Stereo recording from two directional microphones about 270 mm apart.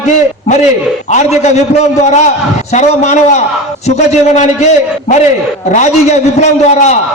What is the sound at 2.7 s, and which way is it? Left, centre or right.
A man's voice, left.